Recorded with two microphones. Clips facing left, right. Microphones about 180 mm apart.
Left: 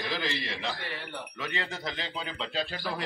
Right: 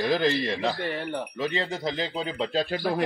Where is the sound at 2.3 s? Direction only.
45° right (ahead or behind).